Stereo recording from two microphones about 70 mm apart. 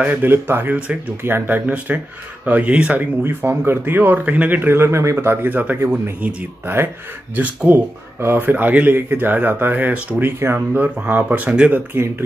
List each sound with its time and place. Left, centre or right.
0.0 s speech: right
3.3 s speech: right
4.6 s speech: right
5.8 s speech: right
7.3 s speech: right
11.9 s speech: right